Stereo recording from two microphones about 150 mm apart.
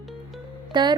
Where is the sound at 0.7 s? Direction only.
30° right (ahead or behind).